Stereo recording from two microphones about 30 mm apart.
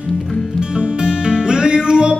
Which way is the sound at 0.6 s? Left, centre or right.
Right.